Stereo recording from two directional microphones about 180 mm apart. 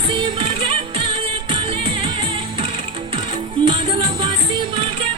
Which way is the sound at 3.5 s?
30° right (ahead or behind).